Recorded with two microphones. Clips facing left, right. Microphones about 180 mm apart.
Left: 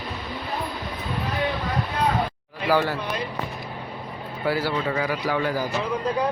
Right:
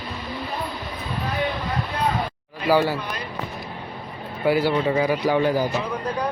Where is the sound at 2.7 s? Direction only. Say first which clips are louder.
Right 3 dB; 10° right (ahead or behind).